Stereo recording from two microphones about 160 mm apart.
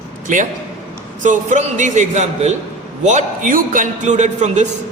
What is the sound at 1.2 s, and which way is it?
Speech, 50° right (ahead or behind).